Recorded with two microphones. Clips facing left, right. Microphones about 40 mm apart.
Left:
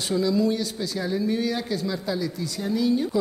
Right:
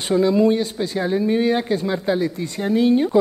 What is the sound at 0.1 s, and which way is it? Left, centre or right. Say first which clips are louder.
Speech: right 7 dB; right.